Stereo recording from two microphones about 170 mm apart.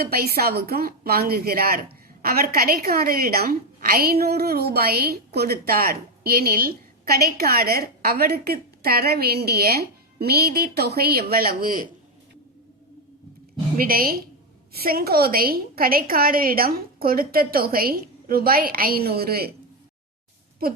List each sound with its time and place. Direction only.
0.0 s a woman's voice: 65° right (ahead or behind)
13.7 s a woman's voice: 60° right (ahead or behind)